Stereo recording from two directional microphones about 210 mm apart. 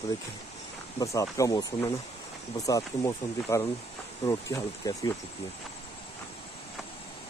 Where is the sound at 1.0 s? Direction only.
15° left (ahead or behind).